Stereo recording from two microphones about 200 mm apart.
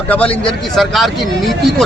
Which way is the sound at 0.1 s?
5° left (ahead or behind).